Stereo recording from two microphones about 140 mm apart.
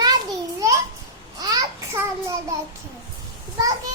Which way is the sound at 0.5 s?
20° right (ahead or behind).